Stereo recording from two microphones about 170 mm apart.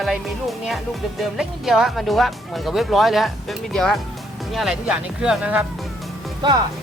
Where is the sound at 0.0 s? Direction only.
Centre (ahead or behind).